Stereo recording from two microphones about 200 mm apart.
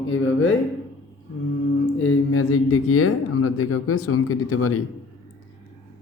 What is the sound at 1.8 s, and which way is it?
Speech, 90° left.